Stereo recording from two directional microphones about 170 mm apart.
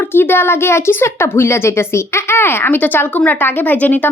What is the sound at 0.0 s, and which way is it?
A woman's voice, 15° left (ahead or behind).